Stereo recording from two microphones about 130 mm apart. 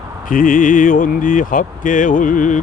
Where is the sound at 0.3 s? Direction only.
90° left.